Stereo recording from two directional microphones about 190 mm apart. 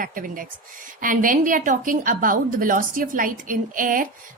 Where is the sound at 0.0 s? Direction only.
45° right (ahead or behind).